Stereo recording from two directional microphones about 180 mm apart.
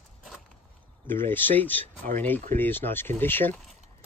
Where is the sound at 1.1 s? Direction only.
10° left (ahead or behind).